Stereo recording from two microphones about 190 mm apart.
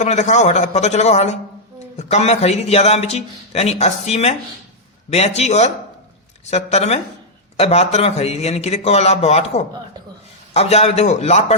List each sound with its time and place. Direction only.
0.0 s a man's voice: 35° left (ahead or behind)